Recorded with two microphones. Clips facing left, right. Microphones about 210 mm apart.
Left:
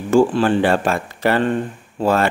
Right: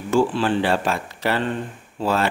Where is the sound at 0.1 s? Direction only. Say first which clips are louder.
Left 5 dB; 50° left (ahead or behind).